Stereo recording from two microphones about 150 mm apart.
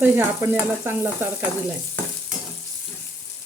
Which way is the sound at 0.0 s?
15° right (ahead or behind).